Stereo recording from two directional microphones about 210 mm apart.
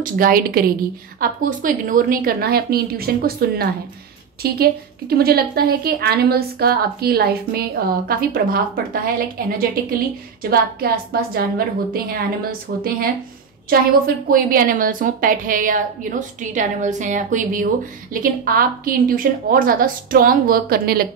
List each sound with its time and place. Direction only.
0.0 s a woman's voice: 45° right (ahead or behind)